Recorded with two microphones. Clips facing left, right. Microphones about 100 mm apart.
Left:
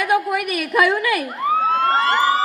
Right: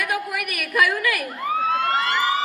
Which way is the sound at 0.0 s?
25° left (ahead or behind).